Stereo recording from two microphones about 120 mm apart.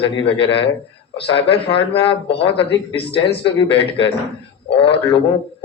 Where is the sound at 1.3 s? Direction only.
50° left (ahead or behind).